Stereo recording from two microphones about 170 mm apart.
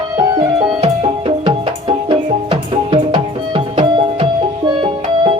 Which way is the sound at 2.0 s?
30° right (ahead or behind).